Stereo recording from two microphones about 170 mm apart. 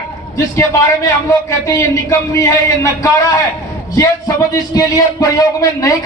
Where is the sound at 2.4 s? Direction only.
20° left (ahead or behind).